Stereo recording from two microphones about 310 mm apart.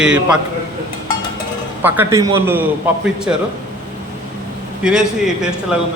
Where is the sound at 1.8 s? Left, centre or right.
Centre.